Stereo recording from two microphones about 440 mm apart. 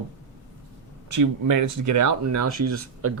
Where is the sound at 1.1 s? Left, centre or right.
Right.